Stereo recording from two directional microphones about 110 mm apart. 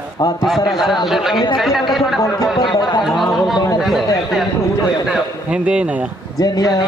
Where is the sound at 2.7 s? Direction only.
45° left (ahead or behind).